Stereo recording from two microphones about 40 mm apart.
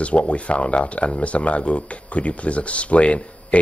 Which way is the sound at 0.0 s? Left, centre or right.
Left.